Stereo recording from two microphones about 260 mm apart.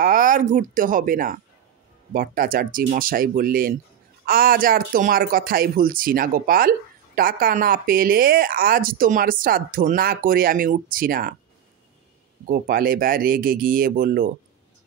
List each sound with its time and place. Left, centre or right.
0.0 s speech: right
12.4 s speech: right